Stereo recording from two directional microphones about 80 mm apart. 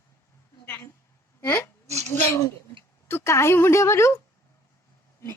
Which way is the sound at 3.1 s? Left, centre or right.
Left.